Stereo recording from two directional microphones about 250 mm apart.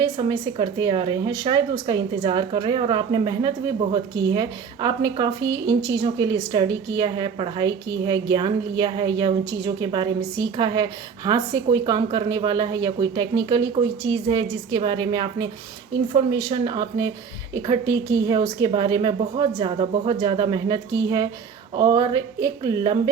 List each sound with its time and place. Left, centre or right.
0.0 s speech: centre